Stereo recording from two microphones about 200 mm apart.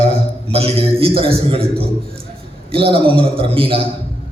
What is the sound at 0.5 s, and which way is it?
A man's voice, 30° right (ahead or behind).